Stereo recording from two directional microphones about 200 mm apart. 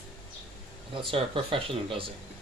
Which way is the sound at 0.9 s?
25° right (ahead or behind).